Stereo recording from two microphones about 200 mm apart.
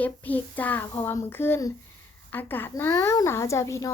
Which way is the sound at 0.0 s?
10° left (ahead or behind).